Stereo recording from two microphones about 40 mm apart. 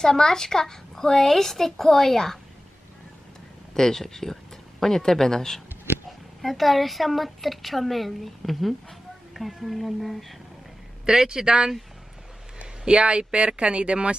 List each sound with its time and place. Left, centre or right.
0.0 s a woman's voice: centre
3.7 s speech: centre
6.4 s a woman's voice: centre
11.1 s speech: centre